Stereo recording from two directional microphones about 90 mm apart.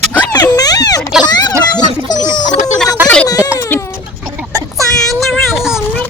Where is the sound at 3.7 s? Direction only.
20° left (ahead or behind).